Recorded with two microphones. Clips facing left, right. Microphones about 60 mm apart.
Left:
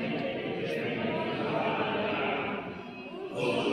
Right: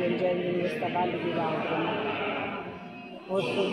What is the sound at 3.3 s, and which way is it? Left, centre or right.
Speech, right.